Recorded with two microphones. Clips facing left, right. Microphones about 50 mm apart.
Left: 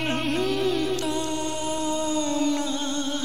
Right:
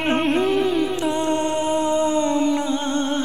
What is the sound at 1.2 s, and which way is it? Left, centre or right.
Music, right.